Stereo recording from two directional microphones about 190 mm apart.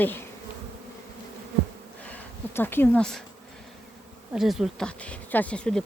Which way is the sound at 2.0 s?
10° left (ahead or behind).